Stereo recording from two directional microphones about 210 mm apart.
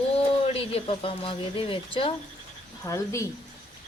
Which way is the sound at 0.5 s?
25° left (ahead or behind).